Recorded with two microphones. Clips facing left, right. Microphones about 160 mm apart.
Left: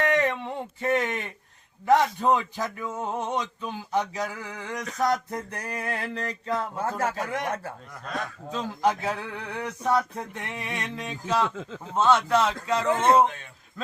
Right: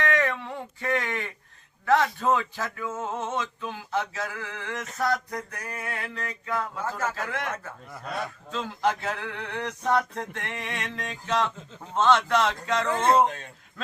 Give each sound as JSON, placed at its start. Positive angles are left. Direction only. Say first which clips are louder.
{"t": 0.0, "sound": "a sound", "louder": "left 2 dB", "side_deg": 20}
{"t": 1.8, "sound": "speech", "louder": "left 2 dB", "side_deg": 20}
{"t": 5.0, "sound": "a sound", "louder": "left 2 dB", "side_deg": 25}
{"t": 7.2, "sound": "speech", "louder": "left 2 dB", "side_deg": 20}
{"t": 8.0, "sound": "a man's voice", "louder": "even", "side_deg": -5}
{"t": 8.4, "sound": "speech", "louder": "left 2 dB", "side_deg": 10}
{"t": 13.2, "sound": "speech", "louder": "even", "side_deg": -35}